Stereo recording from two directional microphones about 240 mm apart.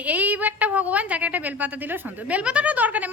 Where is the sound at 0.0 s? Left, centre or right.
Centre.